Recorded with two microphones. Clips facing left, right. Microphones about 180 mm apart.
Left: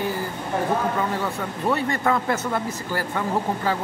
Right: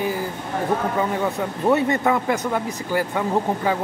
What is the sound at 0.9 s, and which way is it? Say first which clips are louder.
Speech: right 3 dB; 20° right (ahead or behind).